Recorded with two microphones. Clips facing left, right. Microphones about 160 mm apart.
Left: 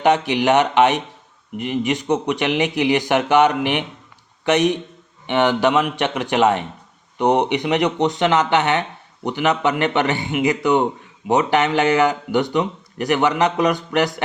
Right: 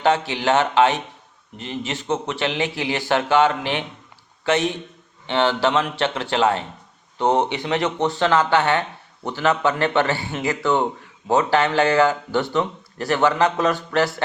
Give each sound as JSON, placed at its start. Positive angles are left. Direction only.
{"t": 0.3, "sound": "speech", "side_deg": 20}